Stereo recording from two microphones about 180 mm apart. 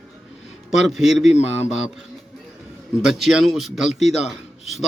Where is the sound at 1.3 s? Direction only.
40° left (ahead or behind).